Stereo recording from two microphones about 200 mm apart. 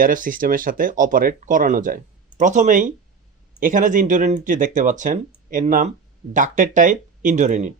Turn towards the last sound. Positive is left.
turn(degrees=-35)  # may be behind; listen again after turning